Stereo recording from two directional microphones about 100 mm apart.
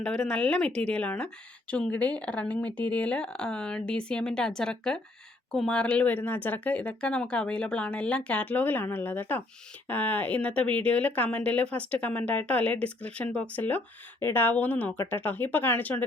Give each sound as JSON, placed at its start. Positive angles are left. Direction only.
{"t": 0.0, "sound": "speech", "side_deg": 10}